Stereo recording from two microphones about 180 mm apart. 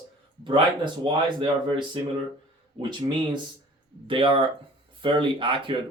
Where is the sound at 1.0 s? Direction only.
25° right (ahead or behind).